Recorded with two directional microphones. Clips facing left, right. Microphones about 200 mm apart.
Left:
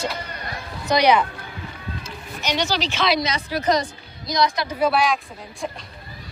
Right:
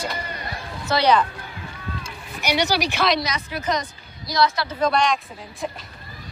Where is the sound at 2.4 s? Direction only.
10° right (ahead or behind).